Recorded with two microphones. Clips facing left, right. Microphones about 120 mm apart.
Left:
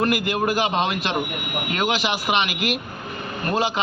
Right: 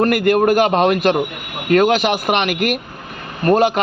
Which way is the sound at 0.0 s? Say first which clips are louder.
Right 8 dB; 55° right (ahead or behind).